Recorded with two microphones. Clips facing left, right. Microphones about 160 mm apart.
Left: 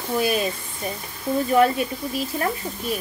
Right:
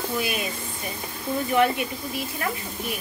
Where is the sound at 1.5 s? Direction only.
35° left (ahead or behind).